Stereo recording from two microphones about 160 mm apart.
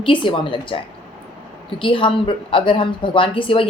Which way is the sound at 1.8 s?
35° left (ahead or behind).